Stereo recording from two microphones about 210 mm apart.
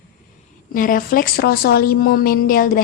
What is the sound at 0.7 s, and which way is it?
A woman's voice, 40° left (ahead or behind).